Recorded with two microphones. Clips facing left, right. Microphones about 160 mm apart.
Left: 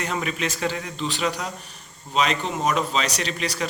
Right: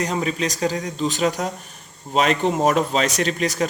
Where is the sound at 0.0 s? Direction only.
35° right (ahead or behind).